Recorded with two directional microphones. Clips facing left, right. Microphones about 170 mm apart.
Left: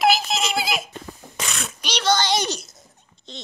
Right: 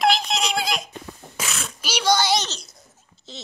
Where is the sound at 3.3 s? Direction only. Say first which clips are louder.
Left 1 dB; 5° right (ahead or behind).